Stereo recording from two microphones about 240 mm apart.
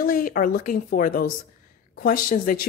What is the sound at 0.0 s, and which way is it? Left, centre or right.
Speech, left.